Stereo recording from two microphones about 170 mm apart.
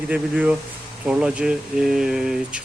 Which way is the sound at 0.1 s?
10° right (ahead or behind).